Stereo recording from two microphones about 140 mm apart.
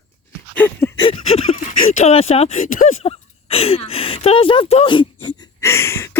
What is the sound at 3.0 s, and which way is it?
Speech, 45° left (ahead or behind).